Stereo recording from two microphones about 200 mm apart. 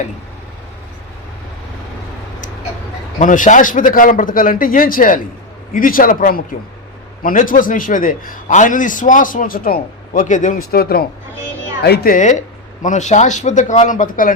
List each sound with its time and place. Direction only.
3.2 s a man's voice: 40° left (ahead or behind)